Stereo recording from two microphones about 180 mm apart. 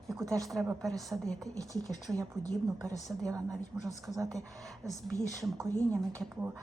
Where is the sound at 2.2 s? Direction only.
15° right (ahead or behind).